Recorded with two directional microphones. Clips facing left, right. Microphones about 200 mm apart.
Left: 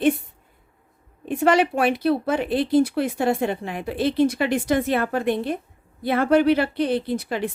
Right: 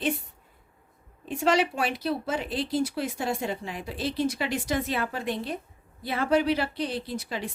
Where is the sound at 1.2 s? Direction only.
55° left (ahead or behind).